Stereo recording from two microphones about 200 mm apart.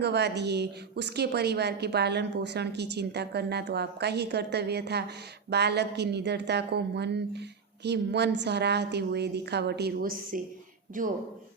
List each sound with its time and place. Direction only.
0.0 s a woman's voice: 55° right (ahead or behind)